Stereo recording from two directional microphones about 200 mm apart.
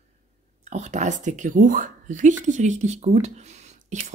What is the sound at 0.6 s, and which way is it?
A woman's voice, 35° right (ahead or behind).